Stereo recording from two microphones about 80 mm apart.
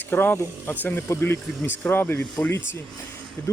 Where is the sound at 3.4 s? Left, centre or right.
Left.